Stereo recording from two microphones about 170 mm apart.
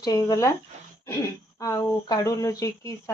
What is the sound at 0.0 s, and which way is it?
Speech, 25° left (ahead or behind).